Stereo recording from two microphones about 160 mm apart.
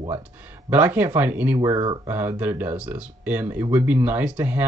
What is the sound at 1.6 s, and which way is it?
Speech, 25° right (ahead or behind).